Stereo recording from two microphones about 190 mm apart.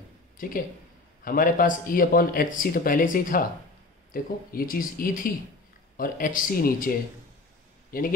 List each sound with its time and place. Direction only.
0.4 s speech: 45° left (ahead or behind)